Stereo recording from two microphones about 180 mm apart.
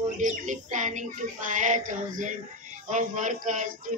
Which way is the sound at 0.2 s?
45° right (ahead or behind).